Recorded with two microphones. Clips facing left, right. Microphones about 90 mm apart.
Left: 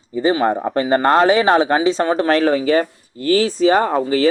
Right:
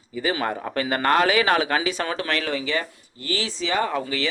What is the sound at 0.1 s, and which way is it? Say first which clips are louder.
Speech: left 9 dB; 30° left (ahead or behind).